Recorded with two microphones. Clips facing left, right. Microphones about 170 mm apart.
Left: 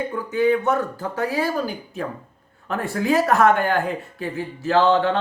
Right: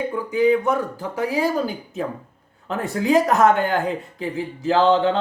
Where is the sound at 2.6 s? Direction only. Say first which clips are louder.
Right 1 dB; 20° right (ahead or behind).